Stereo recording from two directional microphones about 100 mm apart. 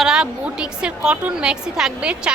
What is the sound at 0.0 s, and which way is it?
A woman's voice, 5° right (ahead or behind).